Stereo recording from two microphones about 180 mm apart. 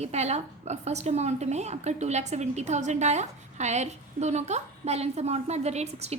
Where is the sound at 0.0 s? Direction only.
35° right (ahead or behind).